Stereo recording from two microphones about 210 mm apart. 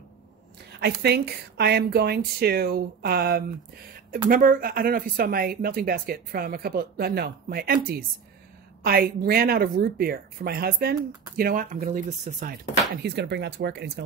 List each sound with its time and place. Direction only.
0.7 s speech: 50° right (ahead or behind)